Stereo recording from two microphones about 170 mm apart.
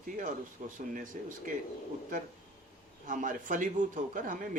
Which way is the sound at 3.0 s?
50° right (ahead or behind).